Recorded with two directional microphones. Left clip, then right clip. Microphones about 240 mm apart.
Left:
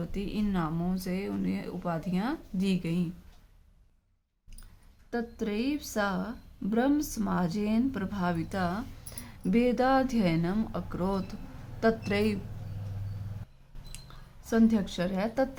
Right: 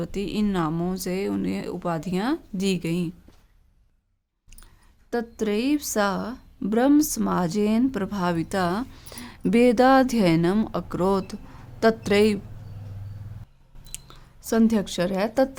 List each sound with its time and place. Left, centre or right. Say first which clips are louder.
0.0 s a woman's voice: right 7 dB; right
5.1 s a woman's voice: right 7 dB; right
13.9 s speech: right 7 dB; right